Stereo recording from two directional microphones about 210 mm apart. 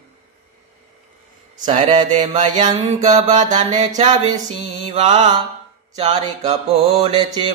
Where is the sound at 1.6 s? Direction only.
30° right (ahead or behind).